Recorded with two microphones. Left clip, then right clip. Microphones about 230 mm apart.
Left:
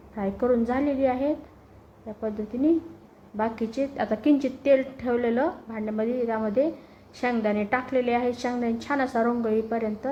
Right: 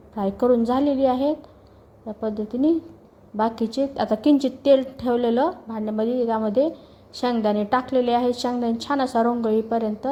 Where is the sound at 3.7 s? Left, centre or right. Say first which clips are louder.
Right 4 dB; right.